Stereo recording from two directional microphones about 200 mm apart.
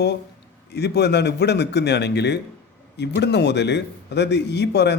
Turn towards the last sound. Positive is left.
turn(degrees=55)  # may be behind; listen again after turning